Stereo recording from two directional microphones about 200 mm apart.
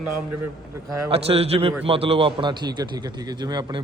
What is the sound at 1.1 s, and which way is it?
A man's voice, 30° right (ahead or behind).